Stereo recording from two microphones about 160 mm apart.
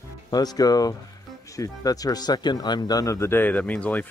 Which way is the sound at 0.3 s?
25° left (ahead or behind).